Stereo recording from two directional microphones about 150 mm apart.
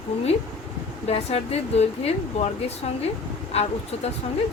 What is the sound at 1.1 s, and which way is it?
Speech, 45° left (ahead or behind).